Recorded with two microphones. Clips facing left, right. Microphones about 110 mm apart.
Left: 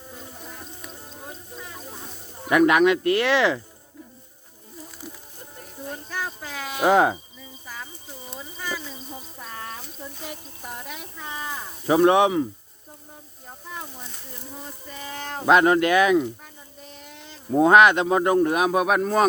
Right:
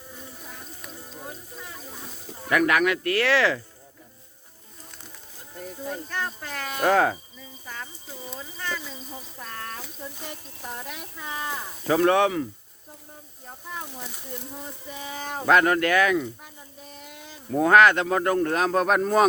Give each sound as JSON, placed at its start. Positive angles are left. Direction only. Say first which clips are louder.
{"t": 0.2, "sound": "bird", "louder": "left 2 dB", "side_deg": 0}
{"t": 1.3, "sound": "a sound", "louder": "left 1 dB", "side_deg": 0}
{"t": 2.4, "sound": "speech", "louder": "left 4 dB", "side_deg": 20}
{"t": 6.1, "sound": "speech", "louder": "even", "side_deg": 5}
{"t": 6.9, "sound": "speech", "louder": "left 3 dB", "side_deg": 20}
{"t": 7.3, "sound": "cricket", "louder": "even", "side_deg": 5}
{"t": 8.4, "sound": "a sound", "louder": "left 1 dB", "side_deg": 5}
{"t": 11.9, "sound": "speech", "louder": "left 3 dB", "side_deg": 20}
{"t": 13.5, "sound": "speech", "louder": "right 1 dB", "side_deg": 0}
{"t": 14.8, "sound": "speech", "louder": "even", "side_deg": -10}
{"t": 15.4, "sound": "speech", "louder": "left 3 dB", "side_deg": 20}
{"t": 16.8, "sound": "a sound", "louder": "even", "side_deg": -5}
{"t": 17.5, "sound": "speech", "louder": "left 2 dB", "side_deg": 20}